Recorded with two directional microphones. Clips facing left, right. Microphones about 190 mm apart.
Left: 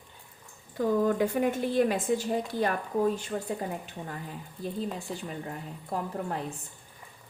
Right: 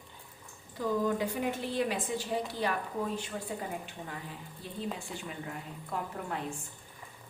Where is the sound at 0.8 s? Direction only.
50° left (ahead or behind).